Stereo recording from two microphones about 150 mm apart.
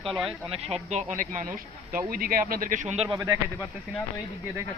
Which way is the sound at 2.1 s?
75° right (ahead or behind).